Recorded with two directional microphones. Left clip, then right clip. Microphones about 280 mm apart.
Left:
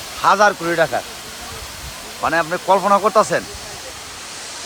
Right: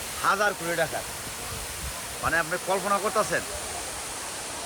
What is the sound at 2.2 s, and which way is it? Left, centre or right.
Speech, centre.